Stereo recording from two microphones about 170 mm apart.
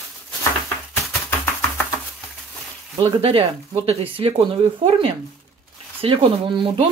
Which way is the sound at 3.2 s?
35° right (ahead or behind).